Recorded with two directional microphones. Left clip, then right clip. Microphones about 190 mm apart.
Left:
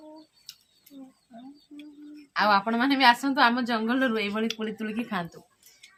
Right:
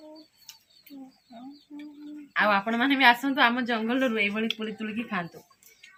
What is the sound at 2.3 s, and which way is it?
A woman's voice, 15° left (ahead or behind).